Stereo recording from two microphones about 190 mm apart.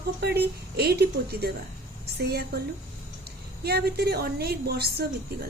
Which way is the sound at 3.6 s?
55° right (ahead or behind).